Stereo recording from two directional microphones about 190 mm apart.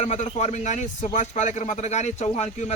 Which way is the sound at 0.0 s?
35° left (ahead or behind).